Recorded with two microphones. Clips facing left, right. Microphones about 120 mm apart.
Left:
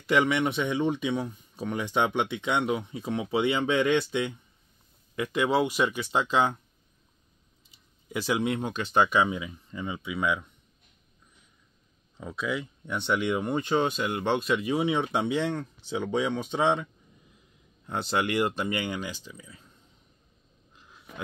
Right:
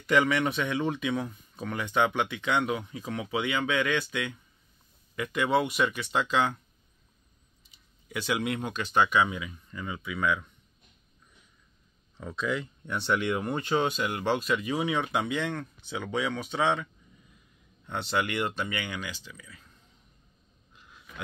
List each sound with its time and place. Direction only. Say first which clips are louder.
0.1 s speech: left 1 dB; 20° left (ahead or behind)
8.1 s speech: left 3 dB; 25° left (ahead or behind)
12.2 s speech: even; 10° left (ahead or behind); by 19.3 s 40° left (ahead or behind)
19.3 s speech: left 2 dB; 25° left (ahead or behind)
20.7 s a sound: even; 30° left (ahead or behind)